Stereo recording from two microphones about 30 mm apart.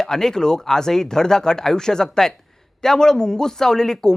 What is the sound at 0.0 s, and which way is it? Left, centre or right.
Speech, centre.